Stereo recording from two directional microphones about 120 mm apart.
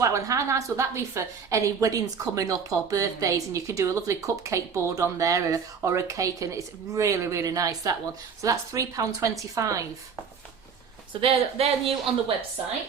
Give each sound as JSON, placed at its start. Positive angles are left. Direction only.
{"t": 0.0, "sound": "a woman's voice", "side_deg": -25}
{"t": 11.2, "sound": "speech", "side_deg": -55}